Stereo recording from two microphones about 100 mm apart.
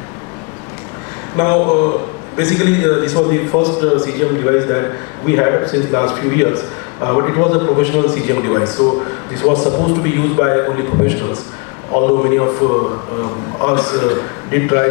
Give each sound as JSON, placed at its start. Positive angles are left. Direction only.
{"t": 1.3, "sound": "a man's voice", "side_deg": 25}
{"t": 13.7, "sound": "a man's voice", "side_deg": 20}